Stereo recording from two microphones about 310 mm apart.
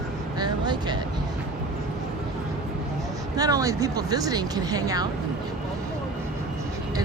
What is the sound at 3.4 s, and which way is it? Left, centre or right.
Speech, centre.